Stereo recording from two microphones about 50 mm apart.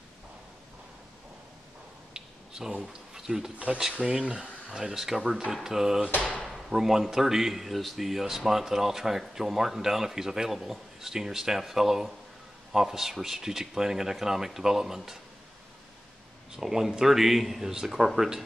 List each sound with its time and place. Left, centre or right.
2.1 s a sound: centre
3.5 s speech: right
4.6 s speech: centre
16.5 s speech: centre